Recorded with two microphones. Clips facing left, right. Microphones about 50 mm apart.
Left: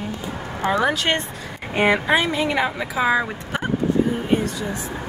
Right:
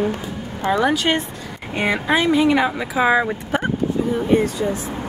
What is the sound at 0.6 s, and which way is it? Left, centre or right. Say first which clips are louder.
Speech: right 2 dB; centre.